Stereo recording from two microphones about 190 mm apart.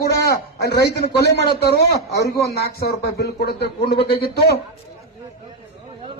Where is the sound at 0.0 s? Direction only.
55° left (ahead or behind).